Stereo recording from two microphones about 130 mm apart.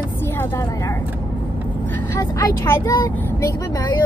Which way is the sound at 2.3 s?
20° left (ahead or behind).